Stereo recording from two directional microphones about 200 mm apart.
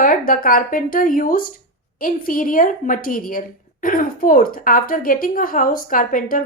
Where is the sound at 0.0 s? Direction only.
45° left (ahead or behind).